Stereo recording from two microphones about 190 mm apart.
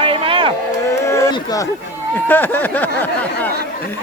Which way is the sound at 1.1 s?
15° left (ahead or behind).